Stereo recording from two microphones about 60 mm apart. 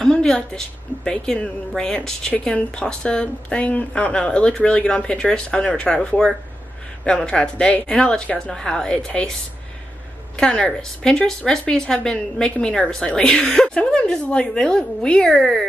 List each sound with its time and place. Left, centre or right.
0.0 s a woman's voice: centre
2.4 s a woman's voice: centre
10.3 s a woman's voice: centre